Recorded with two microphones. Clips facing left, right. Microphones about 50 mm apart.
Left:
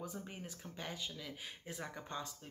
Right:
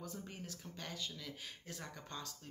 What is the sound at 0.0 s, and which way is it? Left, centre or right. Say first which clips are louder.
Speech: left 2 dB; centre.